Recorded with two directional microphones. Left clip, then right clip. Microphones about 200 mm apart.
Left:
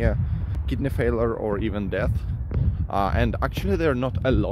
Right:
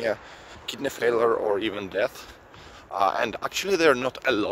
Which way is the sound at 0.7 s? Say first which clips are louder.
Right 1 dB; 15° right (ahead or behind).